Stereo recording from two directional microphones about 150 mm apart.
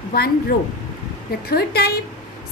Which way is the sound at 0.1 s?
90° left.